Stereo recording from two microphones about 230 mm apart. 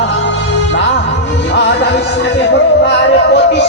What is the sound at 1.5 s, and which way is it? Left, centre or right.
Music, left.